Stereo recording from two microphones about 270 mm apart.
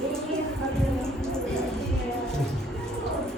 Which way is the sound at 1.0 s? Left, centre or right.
Centre.